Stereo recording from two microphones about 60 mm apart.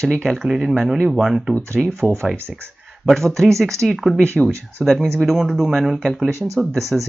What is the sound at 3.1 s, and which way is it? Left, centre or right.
Speech, centre.